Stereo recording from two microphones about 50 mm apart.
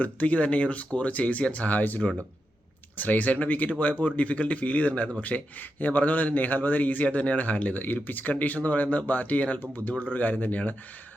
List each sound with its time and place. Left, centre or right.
0.0 s speech: left
3.0 s a man's voice: left